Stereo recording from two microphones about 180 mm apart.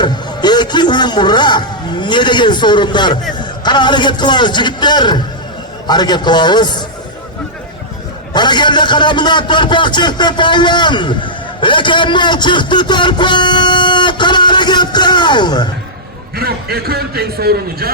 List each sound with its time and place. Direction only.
0.0 s a man's voice: 25° left (ahead or behind)
8.3 s a man's voice: 25° left (ahead or behind)
16.4 s a man's voice: 60° right (ahead or behind)